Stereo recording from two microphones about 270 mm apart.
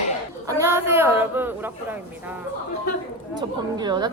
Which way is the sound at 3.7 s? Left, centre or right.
Centre.